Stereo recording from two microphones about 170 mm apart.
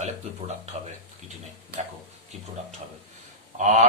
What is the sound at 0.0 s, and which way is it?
Speech, 40° right (ahead or behind).